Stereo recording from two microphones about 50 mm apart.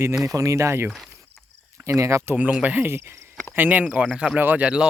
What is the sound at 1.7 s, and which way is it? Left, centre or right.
Speech, right.